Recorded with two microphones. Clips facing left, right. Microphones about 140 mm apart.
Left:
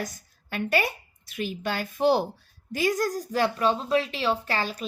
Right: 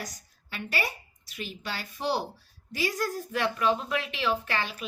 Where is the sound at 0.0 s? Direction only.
55° left (ahead or behind).